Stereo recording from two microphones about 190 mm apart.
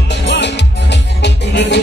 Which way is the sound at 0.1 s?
65° left (ahead or behind).